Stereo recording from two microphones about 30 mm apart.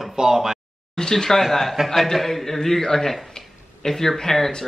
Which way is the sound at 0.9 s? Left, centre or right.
Centre.